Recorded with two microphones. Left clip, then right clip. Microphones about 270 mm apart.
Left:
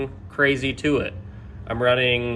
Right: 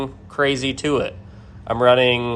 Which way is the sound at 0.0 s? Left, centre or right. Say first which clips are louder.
Right 1 dB; centre.